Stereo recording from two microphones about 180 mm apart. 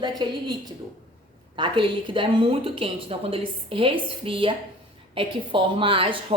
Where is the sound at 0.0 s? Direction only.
25° right (ahead or behind).